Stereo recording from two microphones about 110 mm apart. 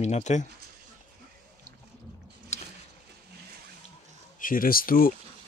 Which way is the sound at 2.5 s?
90° left.